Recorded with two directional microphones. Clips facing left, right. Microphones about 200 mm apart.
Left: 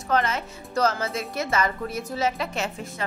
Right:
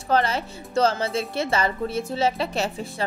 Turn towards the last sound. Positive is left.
turn(degrees=-30)  # may be behind; listen again after turning